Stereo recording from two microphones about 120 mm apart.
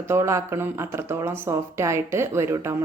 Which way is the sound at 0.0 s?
25° right (ahead or behind).